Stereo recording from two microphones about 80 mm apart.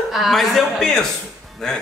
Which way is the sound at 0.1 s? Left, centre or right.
Centre.